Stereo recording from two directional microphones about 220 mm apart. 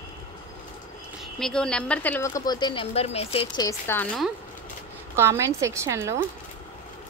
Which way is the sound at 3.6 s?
10° left (ahead or behind).